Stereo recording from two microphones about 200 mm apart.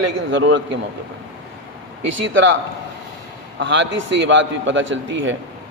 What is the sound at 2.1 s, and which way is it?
A man's voice, 70° right (ahead or behind).